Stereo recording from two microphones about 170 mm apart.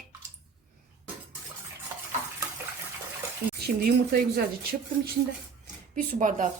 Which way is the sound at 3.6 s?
65° right (ahead or behind).